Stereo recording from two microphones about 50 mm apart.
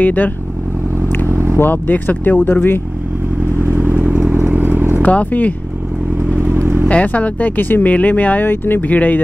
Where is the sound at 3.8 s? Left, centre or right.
Right.